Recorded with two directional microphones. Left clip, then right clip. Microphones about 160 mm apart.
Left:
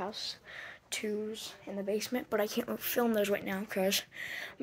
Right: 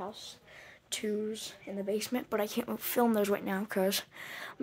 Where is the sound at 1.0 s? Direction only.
30° right (ahead or behind).